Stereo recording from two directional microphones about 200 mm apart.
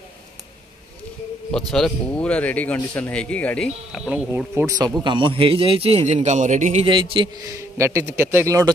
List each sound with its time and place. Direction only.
1.7 s a man's voice: 5° left (ahead or behind)
4.7 s a man's voice: 20° right (ahead or behind)